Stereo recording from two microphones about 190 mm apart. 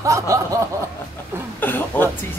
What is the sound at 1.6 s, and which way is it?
Speech, 10° left (ahead or behind).